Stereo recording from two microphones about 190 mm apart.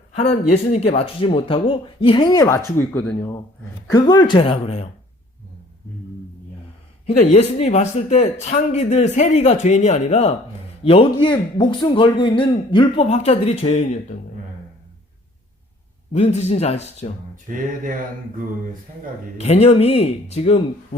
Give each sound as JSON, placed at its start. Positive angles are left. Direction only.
{"t": 0.2, "sound": "speech", "side_deg": 35}
{"t": 2.7, "sound": "speech", "side_deg": 5}
{"t": 3.9, "sound": "a man's voice", "side_deg": 20}
{"t": 7.2, "sound": "a man's voice", "side_deg": 35}
{"t": 16.1, "sound": "a man's voice", "side_deg": 35}
{"t": 17.3, "sound": "speech", "side_deg": -45}
{"t": 19.4, "sound": "a man's voice", "side_deg": 35}